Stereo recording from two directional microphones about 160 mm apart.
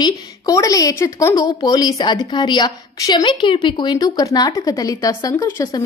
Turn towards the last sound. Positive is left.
turn(degrees=20)  # may be behind; listen again after turning